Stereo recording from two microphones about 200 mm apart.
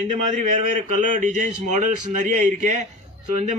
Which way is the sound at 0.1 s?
35° right (ahead or behind).